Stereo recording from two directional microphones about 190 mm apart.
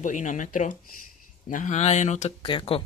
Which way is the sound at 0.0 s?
40° left (ahead or behind).